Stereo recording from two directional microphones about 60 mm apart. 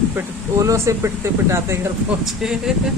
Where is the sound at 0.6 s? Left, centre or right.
Right.